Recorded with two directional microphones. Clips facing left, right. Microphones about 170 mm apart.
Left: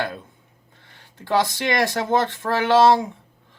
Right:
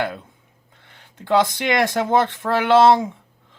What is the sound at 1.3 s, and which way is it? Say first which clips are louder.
Speech: right 3 dB; 20° right (ahead or behind).